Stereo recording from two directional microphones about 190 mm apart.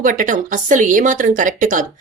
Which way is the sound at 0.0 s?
45° right (ahead or behind).